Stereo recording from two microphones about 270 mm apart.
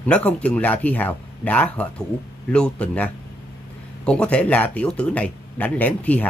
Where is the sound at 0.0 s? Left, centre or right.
Centre.